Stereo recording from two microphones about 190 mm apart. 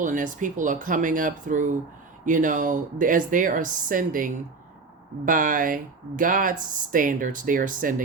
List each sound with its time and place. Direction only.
0.0 s speech: 45° right (ahead or behind)